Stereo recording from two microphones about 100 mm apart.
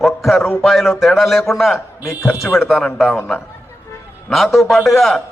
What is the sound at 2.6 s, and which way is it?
A man's voice, centre (ahead or behind).